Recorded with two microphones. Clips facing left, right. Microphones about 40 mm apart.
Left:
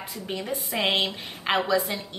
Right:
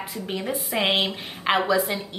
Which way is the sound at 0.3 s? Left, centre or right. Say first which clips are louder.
Right 2 dB; centre.